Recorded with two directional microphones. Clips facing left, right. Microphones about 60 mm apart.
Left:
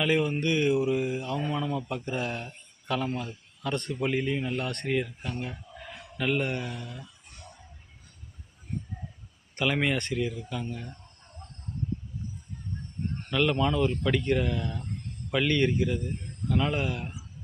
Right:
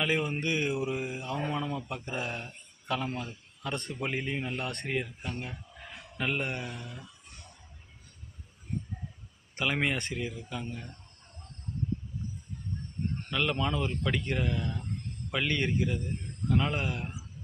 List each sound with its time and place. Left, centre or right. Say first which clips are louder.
0.0 s a man's voice: left 4 dB; centre
9.6 s speech: left 3 dB; centre
13.3 s speech: left 5 dB; centre